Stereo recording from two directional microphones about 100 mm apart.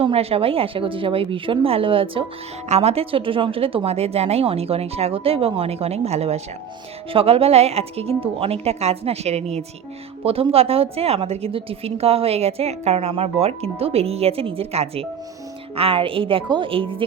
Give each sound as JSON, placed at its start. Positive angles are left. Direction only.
{"t": 0.0, "sound": "a woman's voice", "side_deg": -75}
{"t": 2.7, "sound": "a woman's voice", "side_deg": -90}
{"t": 7.1, "sound": "a woman's voice", "side_deg": -75}
{"t": 10.2, "sound": "a woman's voice", "side_deg": -75}
{"t": 15.7, "sound": "a woman's voice", "side_deg": -70}